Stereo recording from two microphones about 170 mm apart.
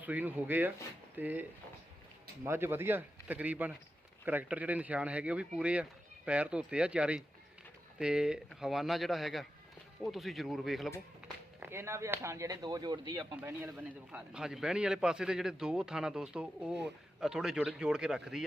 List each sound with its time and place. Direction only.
0.0 s a man's voice: 10° right (ahead or behind)
11.6 s speech: 15° right (ahead or behind)
13.3 s a man's voice: 15° right (ahead or behind)